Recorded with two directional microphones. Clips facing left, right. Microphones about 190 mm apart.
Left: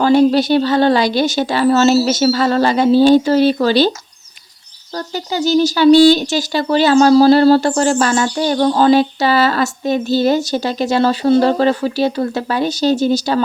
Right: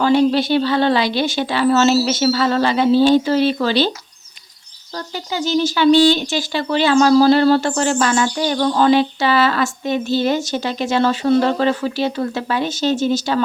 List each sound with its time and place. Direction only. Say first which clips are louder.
0.0 s speech: left 3 dB; 40° left (ahead or behind)
4.9 s speech: left 4 dB; 40° left (ahead or behind)